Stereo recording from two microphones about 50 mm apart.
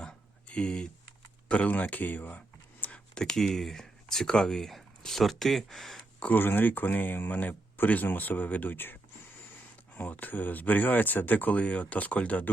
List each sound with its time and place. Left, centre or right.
0.0 s a sound: centre
1.5 s speech: left
2.9 s speech: centre
4.7 s speech: centre
6.3 s speech: left